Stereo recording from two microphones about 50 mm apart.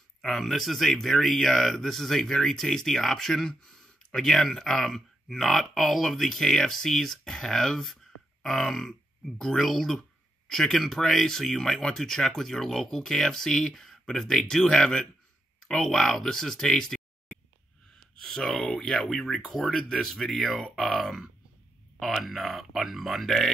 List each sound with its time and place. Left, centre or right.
0.2 s speech: centre
18.2 s speech: centre